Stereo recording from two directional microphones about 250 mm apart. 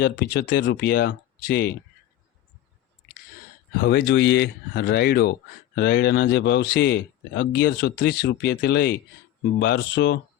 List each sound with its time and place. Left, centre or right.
0.0 s speech: left
3.8 s speech: left